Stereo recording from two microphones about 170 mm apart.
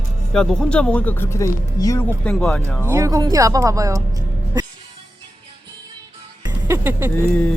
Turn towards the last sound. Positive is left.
turn(degrees=10)  # may be behind; listen again after turning